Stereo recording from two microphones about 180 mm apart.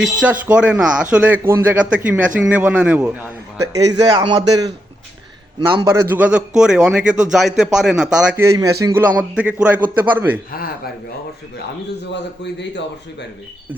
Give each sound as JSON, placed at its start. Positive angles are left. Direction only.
{"t": 0.0, "sound": "a man's voice", "side_deg": -5}
{"t": 3.6, "sound": "a man's voice", "side_deg": -20}
{"t": 5.7, "sound": "a man's voice", "side_deg": -20}
{"t": 12.1, "sound": "speech", "side_deg": 75}